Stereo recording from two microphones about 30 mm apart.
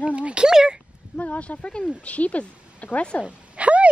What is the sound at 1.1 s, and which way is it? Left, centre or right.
Speech, left.